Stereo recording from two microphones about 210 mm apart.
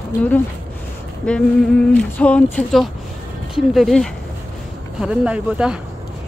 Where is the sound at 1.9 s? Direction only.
5° left (ahead or behind).